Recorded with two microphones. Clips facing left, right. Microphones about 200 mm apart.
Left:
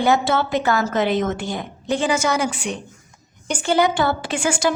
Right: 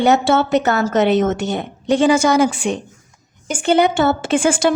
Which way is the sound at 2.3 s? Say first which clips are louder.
Right 7 dB; 30° right (ahead or behind).